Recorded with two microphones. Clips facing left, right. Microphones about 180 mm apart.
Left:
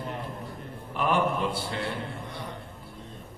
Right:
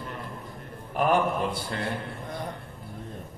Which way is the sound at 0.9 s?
45° right (ahead or behind).